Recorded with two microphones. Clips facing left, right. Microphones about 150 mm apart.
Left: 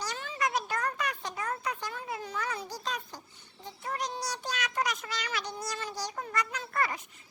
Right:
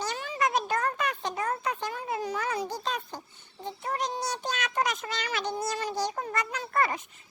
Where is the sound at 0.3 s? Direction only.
25° right (ahead or behind).